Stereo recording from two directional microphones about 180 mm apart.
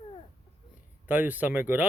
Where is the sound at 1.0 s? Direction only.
10° right (ahead or behind).